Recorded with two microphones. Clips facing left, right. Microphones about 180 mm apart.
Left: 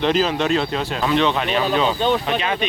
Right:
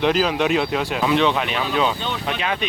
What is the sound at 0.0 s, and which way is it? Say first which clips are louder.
Speech: even; 10° right (ahead or behind).